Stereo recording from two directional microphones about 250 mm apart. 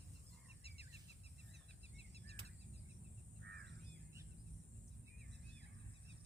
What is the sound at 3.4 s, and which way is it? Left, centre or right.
Crow, right.